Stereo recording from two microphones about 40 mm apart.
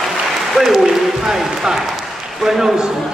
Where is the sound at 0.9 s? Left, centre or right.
Centre.